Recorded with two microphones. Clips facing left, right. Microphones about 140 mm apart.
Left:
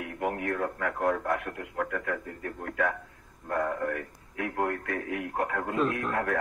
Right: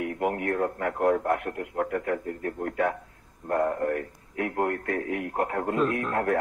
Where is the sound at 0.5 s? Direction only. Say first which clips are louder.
Right 3 dB; 40° right (ahead or behind).